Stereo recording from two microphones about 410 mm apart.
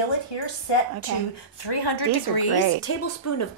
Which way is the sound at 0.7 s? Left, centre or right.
Left.